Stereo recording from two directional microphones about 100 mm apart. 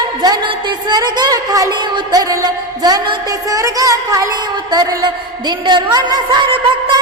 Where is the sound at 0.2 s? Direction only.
45° right (ahead or behind).